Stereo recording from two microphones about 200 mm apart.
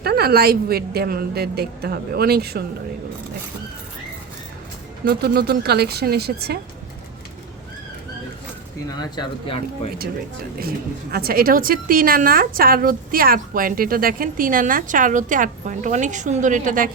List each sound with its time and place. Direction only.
0.0 s a woman's voice: 50° right (ahead or behind)
5.0 s a woman's voice: 50° right (ahead or behind)
8.9 s speech: 20° left (ahead or behind)
11.1 s a woman's voice: 50° right (ahead or behind)